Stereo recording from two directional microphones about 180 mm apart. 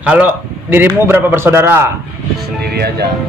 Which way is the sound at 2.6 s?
60° right (ahead or behind).